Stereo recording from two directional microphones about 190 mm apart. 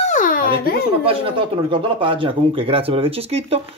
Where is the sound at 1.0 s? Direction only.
30° right (ahead or behind).